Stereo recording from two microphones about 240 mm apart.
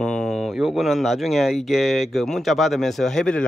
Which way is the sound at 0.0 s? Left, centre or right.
Centre.